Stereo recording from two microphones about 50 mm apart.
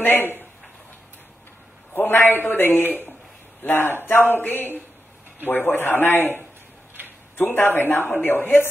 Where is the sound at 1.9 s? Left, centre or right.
Left.